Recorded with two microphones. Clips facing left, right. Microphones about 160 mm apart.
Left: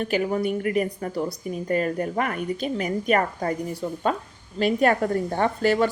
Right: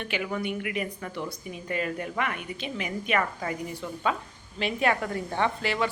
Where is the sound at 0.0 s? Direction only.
40° left (ahead or behind).